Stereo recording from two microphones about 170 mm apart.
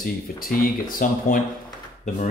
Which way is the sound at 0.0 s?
55° left (ahead or behind).